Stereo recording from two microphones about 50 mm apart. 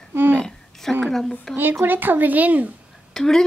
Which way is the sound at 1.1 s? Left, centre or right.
Centre.